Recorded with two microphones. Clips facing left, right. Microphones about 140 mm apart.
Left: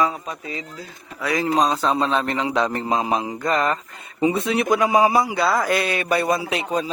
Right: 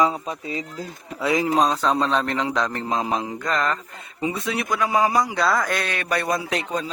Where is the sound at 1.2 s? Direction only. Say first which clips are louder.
Right 2 dB; 20° right (ahead or behind).